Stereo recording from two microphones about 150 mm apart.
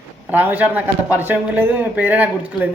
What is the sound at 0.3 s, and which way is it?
A man's voice, 10° right (ahead or behind).